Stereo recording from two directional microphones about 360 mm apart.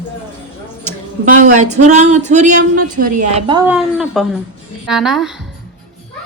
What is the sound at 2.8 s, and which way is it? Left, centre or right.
Speech, right.